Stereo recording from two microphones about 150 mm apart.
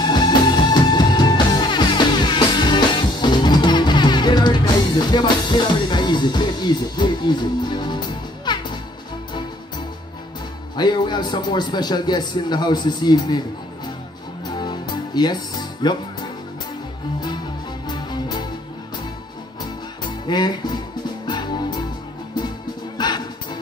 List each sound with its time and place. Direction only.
0.0 s music: 30° left (ahead or behind)
10.8 s a man's voice: 30° left (ahead or behind)
14.5 s music: 30° left (ahead or behind)
17.8 s music: 30° left (ahead or behind)
19.6 s music: 30° left (ahead or behind)
22.9 s music: 30° left (ahead or behind)